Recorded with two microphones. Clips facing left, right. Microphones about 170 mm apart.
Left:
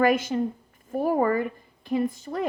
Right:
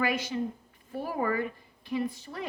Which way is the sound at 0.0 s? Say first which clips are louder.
Left 8 dB; 50° left (ahead or behind).